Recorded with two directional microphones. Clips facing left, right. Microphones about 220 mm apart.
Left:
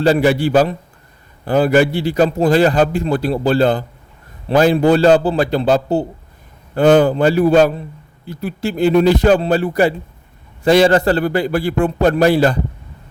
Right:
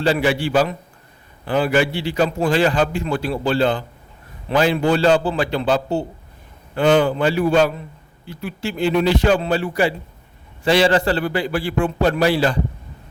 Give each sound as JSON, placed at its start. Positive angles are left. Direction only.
{"t": 0.0, "sound": "a man's voice", "side_deg": 40}